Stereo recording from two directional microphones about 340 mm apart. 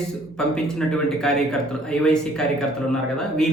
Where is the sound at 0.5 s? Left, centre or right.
Centre.